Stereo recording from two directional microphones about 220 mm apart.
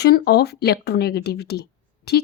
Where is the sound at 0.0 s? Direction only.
45° left (ahead or behind).